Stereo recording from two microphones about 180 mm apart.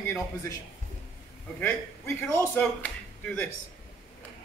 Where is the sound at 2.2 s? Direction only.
15° left (ahead or behind).